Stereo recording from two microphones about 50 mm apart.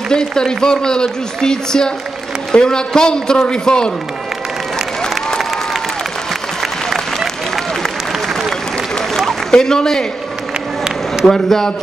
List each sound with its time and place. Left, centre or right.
0.1 s a man's voice: centre
6.6 s applause: centre
8.9 s a sound: centre
11.2 s a man's voice: centre